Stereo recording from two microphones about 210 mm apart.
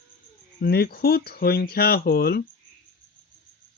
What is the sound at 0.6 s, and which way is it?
Speech, 45° left (ahead or behind).